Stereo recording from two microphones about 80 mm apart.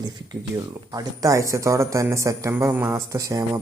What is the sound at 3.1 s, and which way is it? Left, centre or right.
Speech, right.